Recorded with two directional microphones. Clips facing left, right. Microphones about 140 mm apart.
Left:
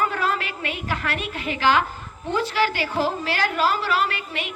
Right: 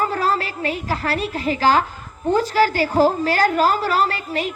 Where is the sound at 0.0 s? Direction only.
35° right (ahead or behind).